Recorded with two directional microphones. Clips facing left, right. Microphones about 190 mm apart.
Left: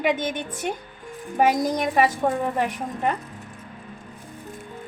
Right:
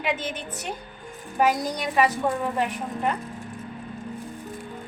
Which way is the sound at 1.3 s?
45° left (ahead or behind).